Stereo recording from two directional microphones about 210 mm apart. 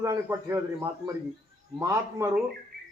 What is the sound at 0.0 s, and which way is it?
A man's voice, 15° right (ahead or behind).